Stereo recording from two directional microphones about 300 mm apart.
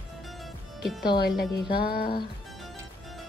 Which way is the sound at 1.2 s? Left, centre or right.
Left.